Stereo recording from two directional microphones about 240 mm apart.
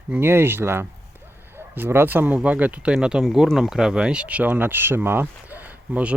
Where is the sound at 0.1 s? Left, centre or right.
Centre.